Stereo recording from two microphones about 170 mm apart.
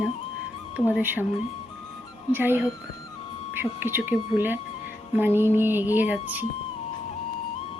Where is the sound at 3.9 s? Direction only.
10° right (ahead or behind).